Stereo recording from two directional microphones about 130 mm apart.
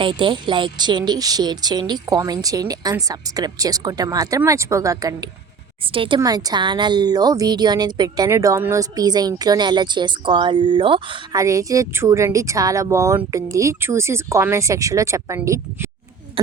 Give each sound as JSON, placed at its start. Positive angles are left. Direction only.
{"t": 0.0, "sound": "speech", "side_deg": -40}
{"t": 5.8, "sound": "a woman's voice", "side_deg": -45}
{"t": 6.1, "sound": "a woman's voice", "side_deg": -30}
{"t": 11.3, "sound": "speech", "side_deg": -25}